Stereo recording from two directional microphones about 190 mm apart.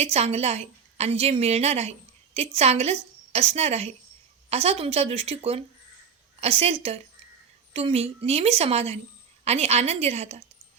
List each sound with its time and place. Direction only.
0.0 s a woman's voice: 35° right (ahead or behind)